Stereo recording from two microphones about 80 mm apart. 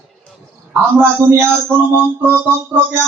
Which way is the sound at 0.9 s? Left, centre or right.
Right.